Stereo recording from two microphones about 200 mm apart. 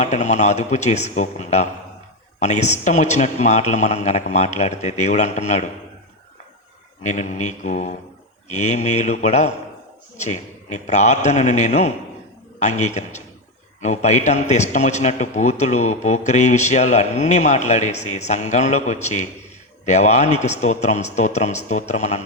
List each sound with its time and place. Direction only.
0.0 s a man's voice: 35° left (ahead or behind)
7.0 s a man's voice: 35° left (ahead or behind)